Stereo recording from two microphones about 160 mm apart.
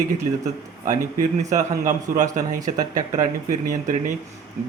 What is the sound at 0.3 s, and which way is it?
A man's voice, 45° right (ahead or behind).